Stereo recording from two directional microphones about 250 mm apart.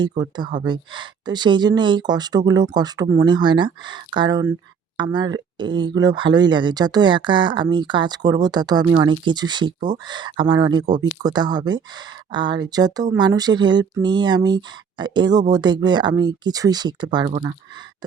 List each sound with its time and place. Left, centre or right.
0.0 s speech: centre